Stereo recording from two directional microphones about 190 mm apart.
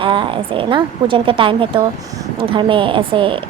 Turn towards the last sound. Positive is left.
turn(degrees=-25)  # may be behind; listen again after turning